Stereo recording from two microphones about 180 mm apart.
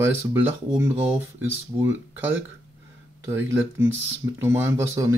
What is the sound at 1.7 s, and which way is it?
Speech, 25° right (ahead or behind).